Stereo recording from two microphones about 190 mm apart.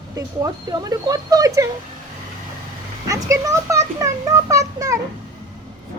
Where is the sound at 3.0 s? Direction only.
15° right (ahead or behind).